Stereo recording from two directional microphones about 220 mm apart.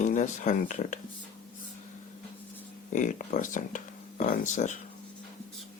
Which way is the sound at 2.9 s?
35° left (ahead or behind).